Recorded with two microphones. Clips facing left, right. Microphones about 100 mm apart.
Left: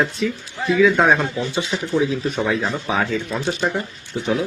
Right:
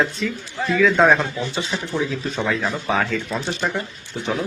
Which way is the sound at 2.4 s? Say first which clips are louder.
Left 1 dB; 15° left (ahead or behind).